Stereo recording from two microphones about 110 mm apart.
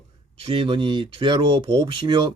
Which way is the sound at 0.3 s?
55° right (ahead or behind).